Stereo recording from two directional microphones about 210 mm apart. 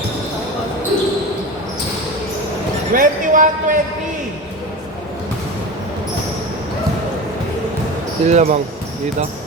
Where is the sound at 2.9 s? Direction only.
40° right (ahead or behind).